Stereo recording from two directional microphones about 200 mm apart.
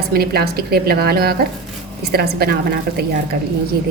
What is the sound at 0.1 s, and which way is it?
A woman's voice, 50° right (ahead or behind).